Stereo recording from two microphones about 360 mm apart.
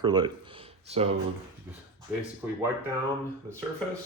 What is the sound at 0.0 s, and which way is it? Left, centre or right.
Speech, centre.